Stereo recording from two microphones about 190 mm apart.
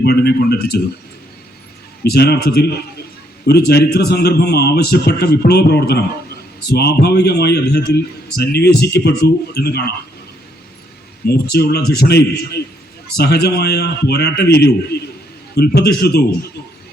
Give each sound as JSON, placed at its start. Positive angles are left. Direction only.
{"t": 0.0, "sound": "a man's voice", "side_deg": 60}
{"t": 2.0, "sound": "a man's voice", "side_deg": 60}
{"t": 11.3, "sound": "a man's voice", "side_deg": 60}